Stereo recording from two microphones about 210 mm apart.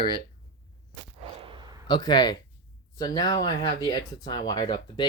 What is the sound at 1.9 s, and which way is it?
Speech, 20° left (ahead or behind).